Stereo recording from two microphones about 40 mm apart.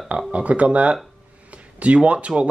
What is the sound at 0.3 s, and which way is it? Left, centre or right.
Speech, right.